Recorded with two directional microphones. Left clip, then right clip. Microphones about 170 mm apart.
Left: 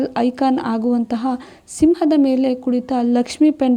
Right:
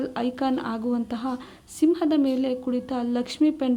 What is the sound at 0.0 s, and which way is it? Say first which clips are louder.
A woman's voice: left 9 dB; 35° left (ahead or behind).